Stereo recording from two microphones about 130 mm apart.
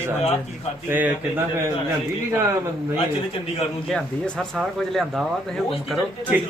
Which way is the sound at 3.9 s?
5° left (ahead or behind).